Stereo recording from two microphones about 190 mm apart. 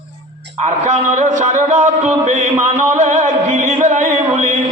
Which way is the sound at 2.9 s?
40° right (ahead or behind).